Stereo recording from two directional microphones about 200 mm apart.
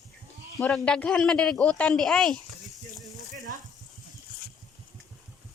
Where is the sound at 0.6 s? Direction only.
5° left (ahead or behind).